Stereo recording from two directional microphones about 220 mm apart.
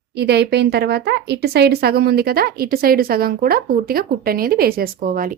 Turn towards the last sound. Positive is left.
turn(degrees=-40)  # may be behind; listen again after turning